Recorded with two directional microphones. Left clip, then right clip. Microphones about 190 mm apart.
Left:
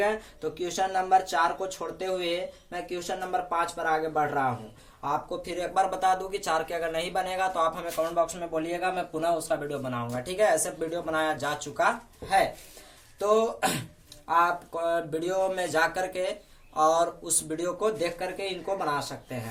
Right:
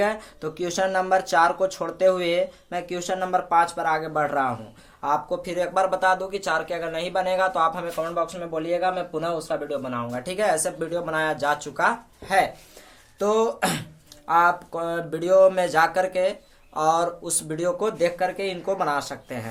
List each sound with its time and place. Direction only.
0.0 s speech: 40° right (ahead or behind)